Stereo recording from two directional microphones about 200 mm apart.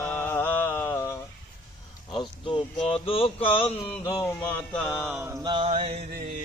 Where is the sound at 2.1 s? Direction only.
25° left (ahead or behind).